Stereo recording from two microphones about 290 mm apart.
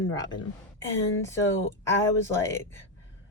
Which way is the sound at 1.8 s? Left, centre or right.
Centre.